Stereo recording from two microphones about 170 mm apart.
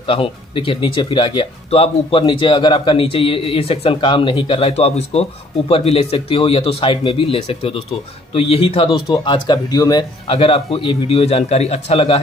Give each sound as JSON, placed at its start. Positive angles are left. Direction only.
{"t": 0.0, "sound": "speech", "side_deg": 30}